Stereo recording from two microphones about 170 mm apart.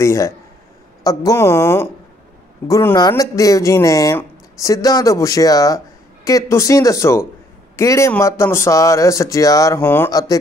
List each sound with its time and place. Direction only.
0.0 s a man's voice: 15° left (ahead or behind)